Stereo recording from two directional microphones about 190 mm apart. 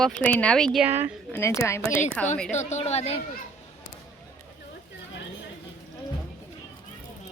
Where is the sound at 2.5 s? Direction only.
35° left (ahead or behind).